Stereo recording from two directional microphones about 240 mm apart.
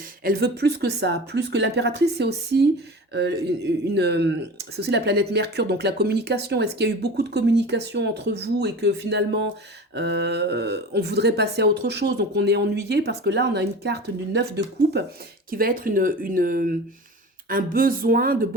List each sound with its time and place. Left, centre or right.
0.3 s speech: right